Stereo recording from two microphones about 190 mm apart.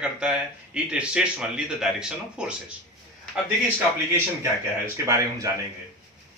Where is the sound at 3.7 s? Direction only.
15° right (ahead or behind).